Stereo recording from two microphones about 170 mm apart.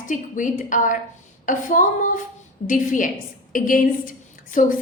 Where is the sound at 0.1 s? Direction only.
50° left (ahead or behind).